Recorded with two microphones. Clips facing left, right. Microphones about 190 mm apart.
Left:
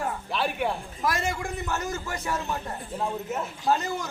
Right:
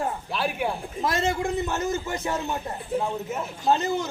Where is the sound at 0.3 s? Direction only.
Centre (ahead or behind).